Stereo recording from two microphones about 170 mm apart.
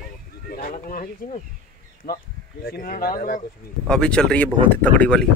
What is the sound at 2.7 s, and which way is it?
Speech, 55° left (ahead or behind).